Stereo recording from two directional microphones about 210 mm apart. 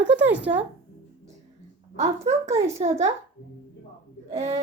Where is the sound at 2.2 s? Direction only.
30° right (ahead or behind).